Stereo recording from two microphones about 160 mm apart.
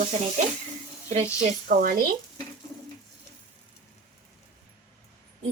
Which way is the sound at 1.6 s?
60° right (ahead or behind).